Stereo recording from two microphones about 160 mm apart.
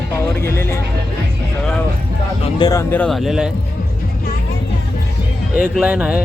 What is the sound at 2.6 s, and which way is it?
Speech, 20° left (ahead or behind).